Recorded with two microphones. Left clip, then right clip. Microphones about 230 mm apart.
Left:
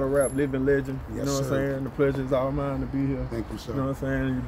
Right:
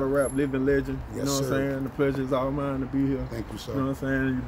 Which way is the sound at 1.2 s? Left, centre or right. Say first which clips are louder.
Even; centre.